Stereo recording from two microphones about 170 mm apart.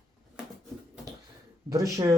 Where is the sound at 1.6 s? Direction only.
20° right (ahead or behind).